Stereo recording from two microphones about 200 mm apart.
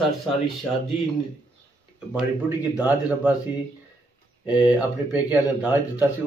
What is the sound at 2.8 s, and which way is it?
Speech, 5° right (ahead or behind).